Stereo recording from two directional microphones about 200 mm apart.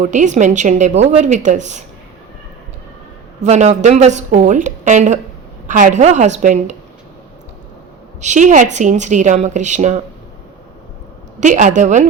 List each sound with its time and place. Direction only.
0.0 s a woman's voice: 40° right (ahead or behind)
3.4 s a woman's voice: 35° right (ahead or behind)
8.2 s a woman's voice: 35° right (ahead or behind)
11.3 s a woman's voice: 35° right (ahead or behind)